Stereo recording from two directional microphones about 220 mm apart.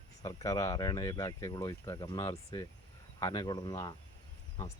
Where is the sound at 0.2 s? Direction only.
15° left (ahead or behind).